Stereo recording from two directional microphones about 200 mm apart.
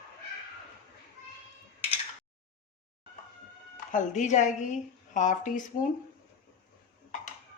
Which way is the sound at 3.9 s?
40° left (ahead or behind).